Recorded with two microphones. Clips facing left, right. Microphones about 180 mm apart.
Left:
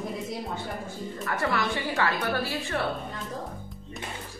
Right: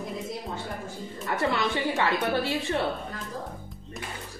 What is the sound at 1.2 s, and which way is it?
A woman's voice, 20° right (ahead or behind).